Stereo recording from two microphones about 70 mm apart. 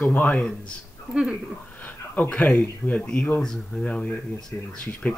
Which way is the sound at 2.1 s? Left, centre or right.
Centre.